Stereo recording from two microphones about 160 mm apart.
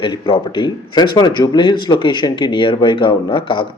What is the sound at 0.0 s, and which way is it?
Speech, 30° left (ahead or behind).